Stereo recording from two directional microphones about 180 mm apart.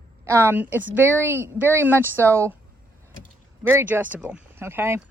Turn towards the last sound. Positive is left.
turn(degrees=-15)  # may be behind; listen again after turning